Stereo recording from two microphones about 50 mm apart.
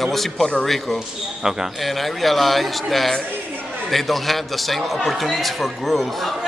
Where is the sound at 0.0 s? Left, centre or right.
Centre.